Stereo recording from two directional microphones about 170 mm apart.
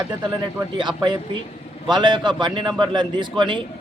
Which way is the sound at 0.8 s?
25° right (ahead or behind).